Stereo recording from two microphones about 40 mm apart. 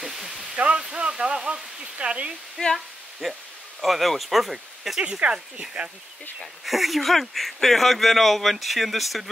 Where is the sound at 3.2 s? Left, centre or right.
Centre.